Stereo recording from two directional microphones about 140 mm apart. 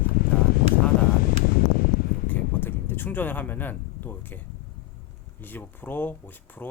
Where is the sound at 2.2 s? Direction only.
10° left (ahead or behind).